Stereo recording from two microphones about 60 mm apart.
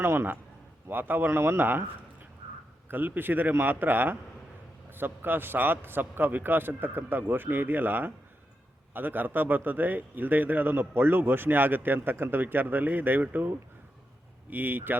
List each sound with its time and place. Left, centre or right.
0.0 s a man's voice: right
1.3 s a man's voice: right
2.9 s a man's voice: right
14.5 s a man's voice: right